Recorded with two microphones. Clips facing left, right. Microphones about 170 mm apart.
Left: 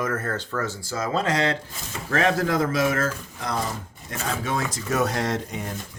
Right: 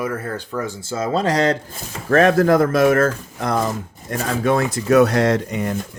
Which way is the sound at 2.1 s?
50° right (ahead or behind).